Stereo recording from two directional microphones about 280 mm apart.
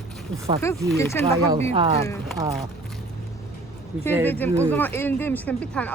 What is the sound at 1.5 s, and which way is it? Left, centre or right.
Speech, right.